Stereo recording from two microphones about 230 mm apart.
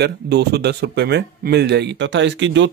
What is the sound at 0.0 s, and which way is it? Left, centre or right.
Speech, right.